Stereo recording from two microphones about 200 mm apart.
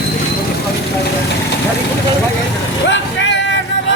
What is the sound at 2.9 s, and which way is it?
Vehicle, 65° left (ahead or behind).